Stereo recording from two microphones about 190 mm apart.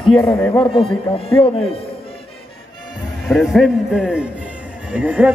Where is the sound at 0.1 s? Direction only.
5° left (ahead or behind).